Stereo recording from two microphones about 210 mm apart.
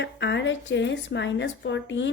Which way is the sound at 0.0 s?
55° left (ahead or behind).